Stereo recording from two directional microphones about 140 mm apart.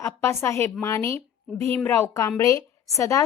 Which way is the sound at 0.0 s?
20° left (ahead or behind).